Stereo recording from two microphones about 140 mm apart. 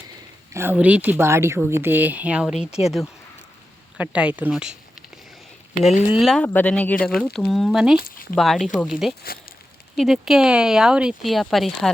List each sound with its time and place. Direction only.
0.5 s speech: 15° right (ahead or behind)
3.9 s speech: 10° right (ahead or behind)
6.1 s speech: 5° right (ahead or behind)
6.5 s speech: 10° left (ahead or behind)
7.2 s speech: centre (ahead or behind)
7.9 s speech: 90° left
8.4 s speech: centre (ahead or behind)
9.2 s speech: 90° left
9.9 s speech: centre (ahead or behind)